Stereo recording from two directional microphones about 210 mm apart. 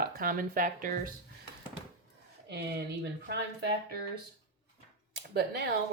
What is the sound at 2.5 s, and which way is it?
Speech, 50° right (ahead or behind).